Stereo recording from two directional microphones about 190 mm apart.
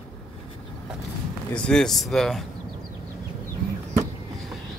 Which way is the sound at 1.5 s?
5° left (ahead or behind).